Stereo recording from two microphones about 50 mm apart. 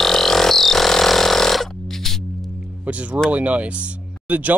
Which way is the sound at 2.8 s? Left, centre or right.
Right.